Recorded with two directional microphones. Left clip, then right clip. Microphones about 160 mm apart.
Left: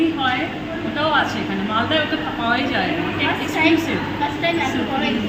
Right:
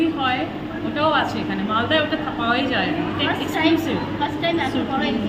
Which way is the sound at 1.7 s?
10° right (ahead or behind).